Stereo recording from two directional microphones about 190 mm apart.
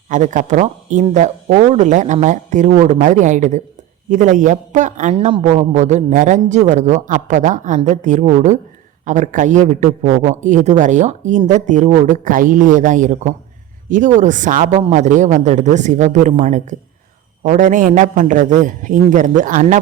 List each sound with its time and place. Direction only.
0.1 s a man's voice: 40° right (ahead or behind)